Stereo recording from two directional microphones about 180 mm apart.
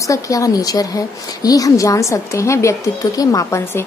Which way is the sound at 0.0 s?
20° left (ahead or behind).